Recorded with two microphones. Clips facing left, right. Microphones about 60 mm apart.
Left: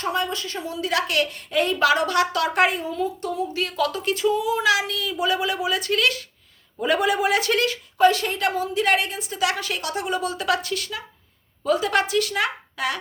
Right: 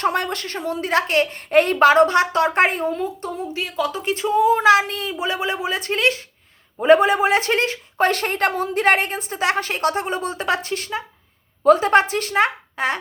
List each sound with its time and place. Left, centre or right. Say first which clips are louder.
0.0 s a woman's voice: right 4 dB; right
1.5 s a woman's voice: right 6 dB; right
3.5 s a woman's voice: right 3 dB; centre
8.0 s a woman's voice: even; right